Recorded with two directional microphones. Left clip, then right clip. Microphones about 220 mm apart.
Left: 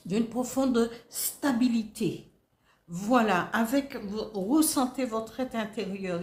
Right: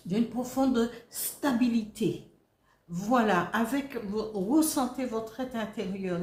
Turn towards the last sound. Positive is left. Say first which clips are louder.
# left 1 dB
turn(degrees=45)  # may be behind; listen again after turning